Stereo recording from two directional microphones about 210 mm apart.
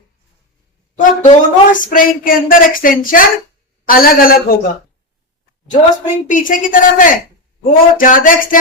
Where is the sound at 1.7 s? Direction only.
40° left (ahead or behind).